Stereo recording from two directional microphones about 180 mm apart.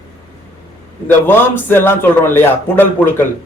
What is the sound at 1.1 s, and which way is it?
A man's voice, 10° left (ahead or behind).